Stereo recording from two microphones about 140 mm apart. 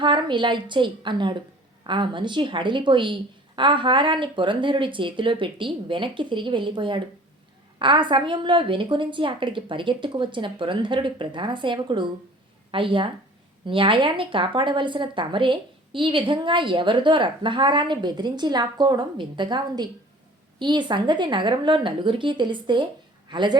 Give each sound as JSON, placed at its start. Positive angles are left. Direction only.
{"t": 0.0, "sound": "a woman's voice", "side_deg": -35}